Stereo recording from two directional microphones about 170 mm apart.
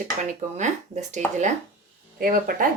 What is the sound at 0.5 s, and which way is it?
Speech, 45° right (ahead or behind).